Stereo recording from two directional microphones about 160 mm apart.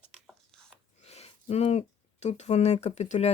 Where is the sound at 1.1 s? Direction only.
40° left (ahead or behind).